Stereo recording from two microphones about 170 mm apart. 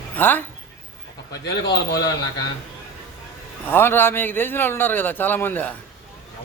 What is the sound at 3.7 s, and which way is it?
A man's voice, 15° left (ahead or behind).